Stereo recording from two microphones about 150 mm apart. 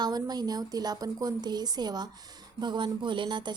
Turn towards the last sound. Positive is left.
turn(degrees=-30)  # may be behind; listen again after turning